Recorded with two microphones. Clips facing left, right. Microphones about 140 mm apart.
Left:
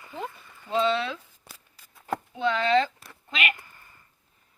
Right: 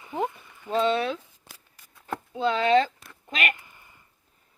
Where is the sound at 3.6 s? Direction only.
15° right (ahead or behind).